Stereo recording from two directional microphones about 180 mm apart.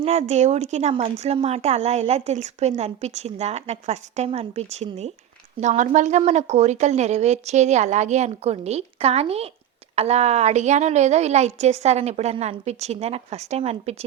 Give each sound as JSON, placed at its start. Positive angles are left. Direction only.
{"t": 0.0, "sound": "speech", "side_deg": -35}